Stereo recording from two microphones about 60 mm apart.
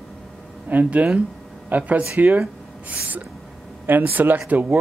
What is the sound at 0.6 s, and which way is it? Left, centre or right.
Speech, right.